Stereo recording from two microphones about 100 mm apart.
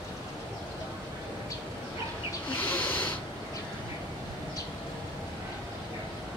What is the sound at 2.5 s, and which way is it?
Snake, 15° left (ahead or behind).